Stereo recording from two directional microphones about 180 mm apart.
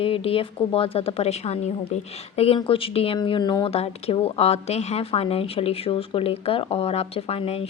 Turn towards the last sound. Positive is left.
turn(degrees=35)  # may be behind; listen again after turning